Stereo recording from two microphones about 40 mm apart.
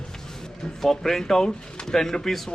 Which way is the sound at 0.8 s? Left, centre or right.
Centre.